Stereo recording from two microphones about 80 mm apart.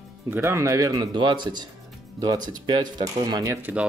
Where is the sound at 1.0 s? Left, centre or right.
Right.